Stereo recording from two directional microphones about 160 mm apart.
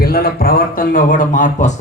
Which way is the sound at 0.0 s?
75° left (ahead or behind).